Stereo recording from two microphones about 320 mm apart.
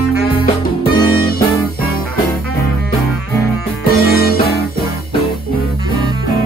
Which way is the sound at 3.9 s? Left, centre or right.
Left.